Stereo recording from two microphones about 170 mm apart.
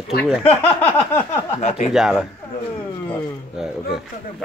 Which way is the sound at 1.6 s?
35° left (ahead or behind).